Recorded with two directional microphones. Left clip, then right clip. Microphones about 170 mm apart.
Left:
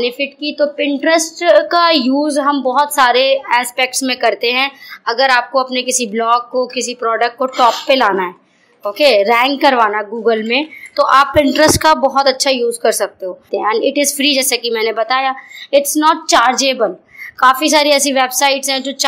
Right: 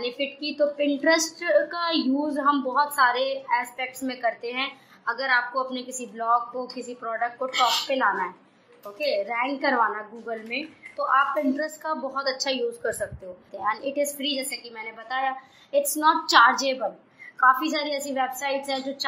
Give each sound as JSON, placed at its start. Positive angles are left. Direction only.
{"t": 0.0, "sound": "a woman's voice", "side_deg": 40}
{"t": 5.9, "sound": "a woman's voice", "side_deg": 45}
{"t": 13.9, "sound": "a woman's voice", "side_deg": 55}
{"t": 16.0, "sound": "a woman's voice", "side_deg": 35}